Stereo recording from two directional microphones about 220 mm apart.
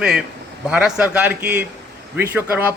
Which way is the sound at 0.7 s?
5° right (ahead or behind).